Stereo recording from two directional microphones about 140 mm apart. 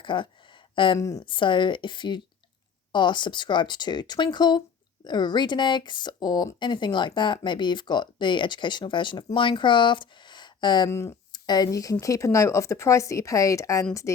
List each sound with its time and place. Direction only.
0.0 s a sound: 35° left (ahead or behind)
0.9 s speech: 25° left (ahead or behind)
1.2 s speech: 35° left (ahead or behind)
10.8 s speech: 20° left (ahead or behind)